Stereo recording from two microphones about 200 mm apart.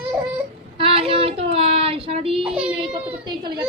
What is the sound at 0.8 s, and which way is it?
Child singing, 25° right (ahead or behind).